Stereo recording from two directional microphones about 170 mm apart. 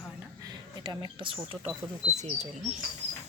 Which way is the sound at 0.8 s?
25° right (ahead or behind).